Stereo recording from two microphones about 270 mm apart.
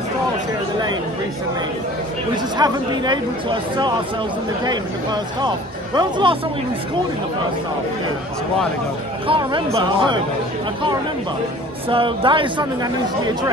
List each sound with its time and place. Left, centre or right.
2.3 s speech: centre
9.3 s speech: centre
11.9 s a woman's voice: centre